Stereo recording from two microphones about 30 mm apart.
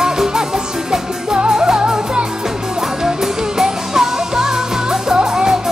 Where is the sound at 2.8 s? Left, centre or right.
Centre.